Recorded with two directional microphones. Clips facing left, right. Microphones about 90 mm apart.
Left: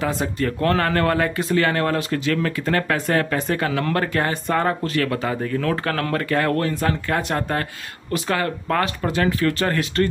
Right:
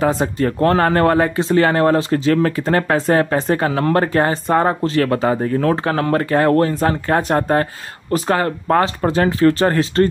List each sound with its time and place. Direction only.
0.0 s speech: 40° right (ahead or behind)
5.9 s speech: 25° right (ahead or behind)